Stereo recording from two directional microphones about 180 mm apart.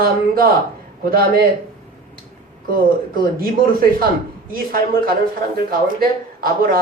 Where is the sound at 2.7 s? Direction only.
55° right (ahead or behind).